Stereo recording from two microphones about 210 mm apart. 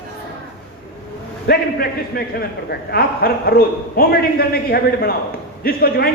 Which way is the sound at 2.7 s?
45° left (ahead or behind).